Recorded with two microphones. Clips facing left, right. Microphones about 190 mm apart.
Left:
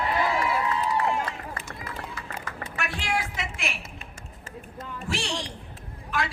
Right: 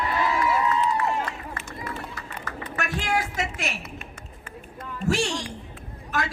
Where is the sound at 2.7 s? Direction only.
45° right (ahead or behind).